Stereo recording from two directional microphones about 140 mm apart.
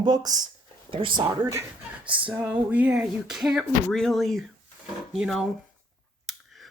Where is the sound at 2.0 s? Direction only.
10° right (ahead or behind).